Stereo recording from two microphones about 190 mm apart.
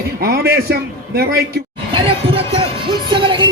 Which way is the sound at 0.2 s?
55° right (ahead or behind).